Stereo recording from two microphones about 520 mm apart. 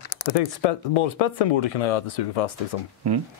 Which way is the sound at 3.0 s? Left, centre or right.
Right.